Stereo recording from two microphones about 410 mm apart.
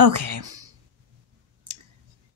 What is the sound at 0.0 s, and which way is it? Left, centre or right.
Speech, right.